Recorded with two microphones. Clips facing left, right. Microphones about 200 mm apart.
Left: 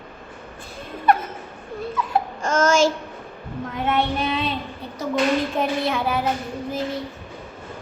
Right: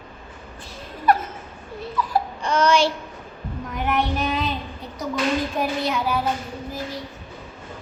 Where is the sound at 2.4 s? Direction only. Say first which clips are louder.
Left 1 dB; 45° left (ahead or behind).